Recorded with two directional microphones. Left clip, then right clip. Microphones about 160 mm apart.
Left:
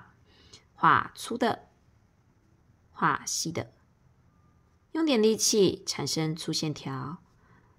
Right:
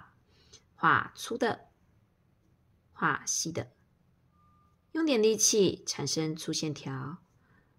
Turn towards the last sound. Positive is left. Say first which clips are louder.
# left 2 dB
turn(degrees=20)  # may be behind; listen again after turning